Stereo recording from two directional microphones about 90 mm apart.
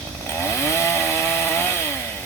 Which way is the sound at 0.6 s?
30° left (ahead or behind).